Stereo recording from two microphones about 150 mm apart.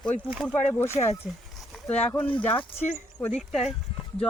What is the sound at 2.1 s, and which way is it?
Speech, 10° left (ahead or behind).